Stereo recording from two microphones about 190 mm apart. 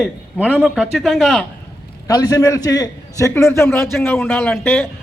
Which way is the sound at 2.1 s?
20° left (ahead or behind).